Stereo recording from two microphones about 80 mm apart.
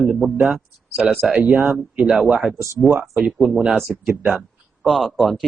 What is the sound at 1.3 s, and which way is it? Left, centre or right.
Speech, centre.